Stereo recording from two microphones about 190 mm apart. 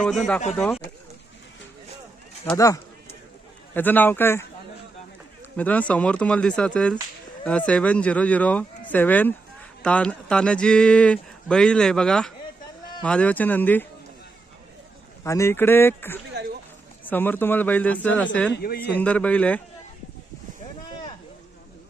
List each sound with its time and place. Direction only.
0.0 s speech: 5° left (ahead or behind)
2.5 s speech: 15° left (ahead or behind)
3.8 s speech: 10° left (ahead or behind)
5.5 s speech: 5° left (ahead or behind)
15.2 s speech: 15° left (ahead or behind)
16.3 s a sound: 60° right (ahead or behind)
17.1 s speech: 10° left (ahead or behind)
18.5 s speech: 55° left (ahead or behind)
18.9 s speech: 5° left (ahead or behind)